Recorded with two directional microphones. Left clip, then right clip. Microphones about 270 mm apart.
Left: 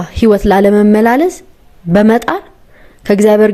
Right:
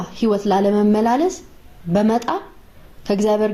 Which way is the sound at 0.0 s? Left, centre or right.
Left.